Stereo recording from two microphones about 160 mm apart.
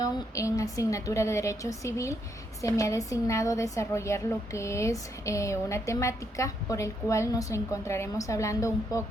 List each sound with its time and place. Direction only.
0.0 s a woman's voice: 20° left (ahead or behind)